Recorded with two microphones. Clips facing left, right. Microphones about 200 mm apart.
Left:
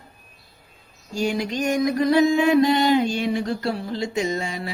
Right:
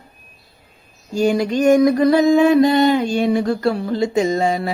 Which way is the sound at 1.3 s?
40° right (ahead or behind).